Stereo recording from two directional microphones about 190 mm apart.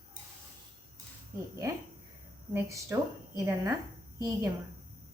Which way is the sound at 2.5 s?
15° right (ahead or behind).